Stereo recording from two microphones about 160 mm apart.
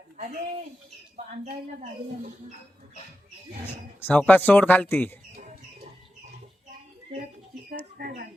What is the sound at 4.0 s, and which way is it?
Speech, 10° left (ahead or behind).